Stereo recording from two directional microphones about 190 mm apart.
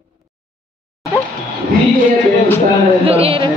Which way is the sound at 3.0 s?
30° right (ahead or behind).